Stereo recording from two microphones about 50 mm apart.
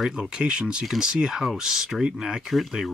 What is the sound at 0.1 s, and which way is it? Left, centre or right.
Speech, centre.